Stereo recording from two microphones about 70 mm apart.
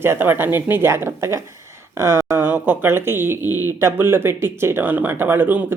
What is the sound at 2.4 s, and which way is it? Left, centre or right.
Speech, right.